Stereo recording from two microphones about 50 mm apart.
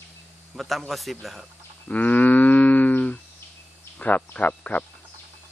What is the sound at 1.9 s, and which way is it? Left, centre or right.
Wild animals, left.